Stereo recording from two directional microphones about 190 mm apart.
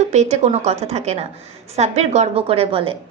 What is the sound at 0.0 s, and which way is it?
A woman's voice, 35° right (ahead or behind).